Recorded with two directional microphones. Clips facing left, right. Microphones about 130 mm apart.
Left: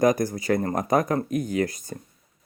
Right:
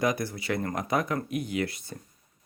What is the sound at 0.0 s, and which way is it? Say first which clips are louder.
Speech: left 7 dB; 45° left (ahead or behind).